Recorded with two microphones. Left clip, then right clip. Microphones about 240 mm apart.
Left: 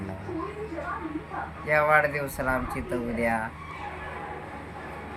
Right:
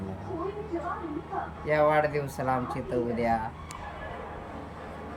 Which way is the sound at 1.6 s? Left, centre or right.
Centre.